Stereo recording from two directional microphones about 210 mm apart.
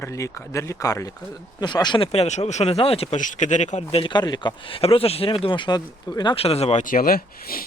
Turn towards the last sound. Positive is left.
turn(degrees=45)  # may be behind; listen again after turning